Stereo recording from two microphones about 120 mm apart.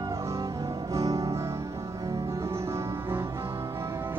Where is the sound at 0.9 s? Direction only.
30° right (ahead or behind).